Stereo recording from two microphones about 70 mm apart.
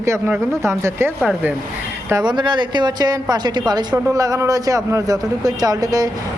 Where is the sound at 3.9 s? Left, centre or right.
Right.